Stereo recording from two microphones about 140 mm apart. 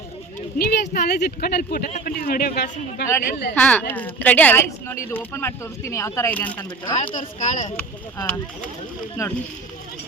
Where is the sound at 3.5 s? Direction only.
10° left (ahead or behind).